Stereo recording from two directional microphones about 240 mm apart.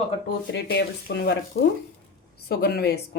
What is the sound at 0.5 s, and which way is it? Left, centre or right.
Speech, left.